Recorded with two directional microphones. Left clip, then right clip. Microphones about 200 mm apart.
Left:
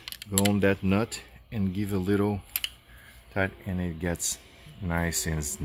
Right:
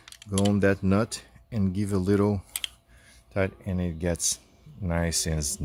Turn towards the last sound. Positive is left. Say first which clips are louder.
# right 2 dB
turn(degrees=-55)  # may be behind; listen again after turning